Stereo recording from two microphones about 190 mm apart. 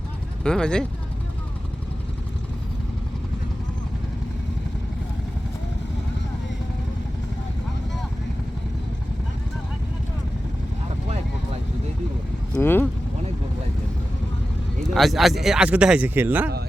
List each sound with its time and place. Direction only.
0.4 s speech: 5° left (ahead or behind)
12.5 s a sound: 10° left (ahead or behind)
14.8 s speech: centre (ahead or behind)